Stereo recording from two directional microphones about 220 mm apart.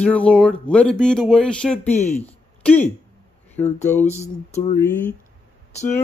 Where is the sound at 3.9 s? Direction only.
10° left (ahead or behind).